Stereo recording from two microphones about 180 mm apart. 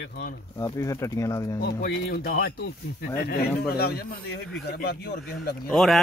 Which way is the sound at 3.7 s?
60° left (ahead or behind).